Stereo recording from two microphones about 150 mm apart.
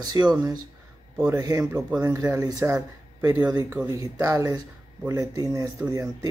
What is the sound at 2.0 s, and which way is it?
Speech, 25° right (ahead or behind).